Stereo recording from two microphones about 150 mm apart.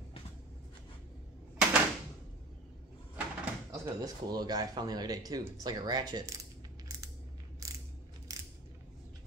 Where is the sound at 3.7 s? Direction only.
25° right (ahead or behind).